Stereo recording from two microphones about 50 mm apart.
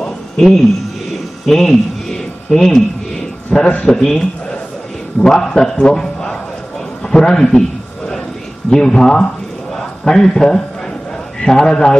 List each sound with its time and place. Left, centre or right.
0.0 s a sound: centre
3.5 s a man's voice: centre
5.8 s a man's voice: centre
8.6 s a man's voice: centre